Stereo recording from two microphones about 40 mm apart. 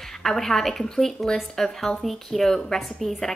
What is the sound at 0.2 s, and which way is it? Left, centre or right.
A woman's voice, centre.